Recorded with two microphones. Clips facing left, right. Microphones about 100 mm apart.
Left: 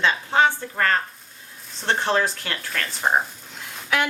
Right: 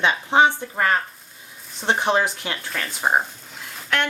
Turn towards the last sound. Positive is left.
turn(degrees=0)  # may be behind; listen again after turning